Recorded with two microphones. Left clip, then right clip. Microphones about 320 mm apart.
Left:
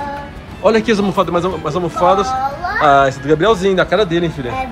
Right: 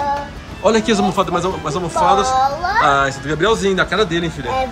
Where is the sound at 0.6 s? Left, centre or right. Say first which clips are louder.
Left 2 dB; centre.